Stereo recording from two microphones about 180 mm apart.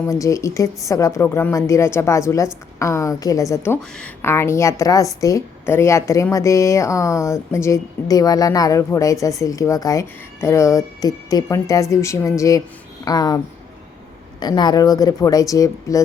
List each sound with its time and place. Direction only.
0.0 s a woman's voice: 15° left (ahead or behind)